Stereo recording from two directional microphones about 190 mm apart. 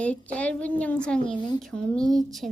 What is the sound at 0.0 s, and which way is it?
A woman's voice, 5° left (ahead or behind).